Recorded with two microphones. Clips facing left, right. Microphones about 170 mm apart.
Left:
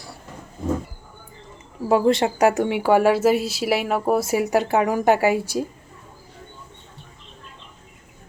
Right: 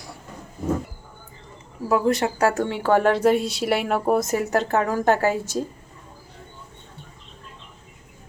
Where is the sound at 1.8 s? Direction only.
25° left (ahead or behind).